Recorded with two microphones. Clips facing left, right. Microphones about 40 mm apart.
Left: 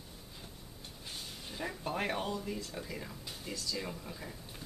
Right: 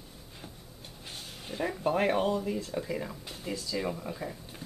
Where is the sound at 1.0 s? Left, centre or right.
Centre.